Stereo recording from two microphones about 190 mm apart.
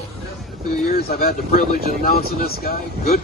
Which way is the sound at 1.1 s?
50° left (ahead or behind).